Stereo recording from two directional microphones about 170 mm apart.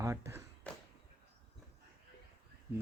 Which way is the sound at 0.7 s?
5° left (ahead or behind).